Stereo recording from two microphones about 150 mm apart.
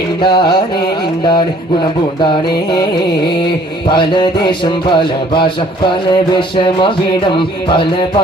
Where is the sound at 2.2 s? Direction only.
30° left (ahead or behind).